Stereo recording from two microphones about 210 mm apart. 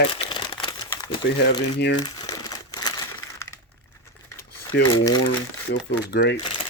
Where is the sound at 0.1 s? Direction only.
25° left (ahead or behind).